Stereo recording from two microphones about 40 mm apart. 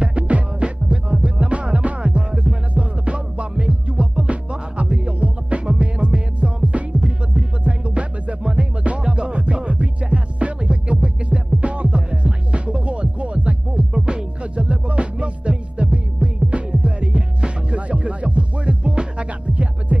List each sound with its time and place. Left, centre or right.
0.0 s music: right
13.9 s music: right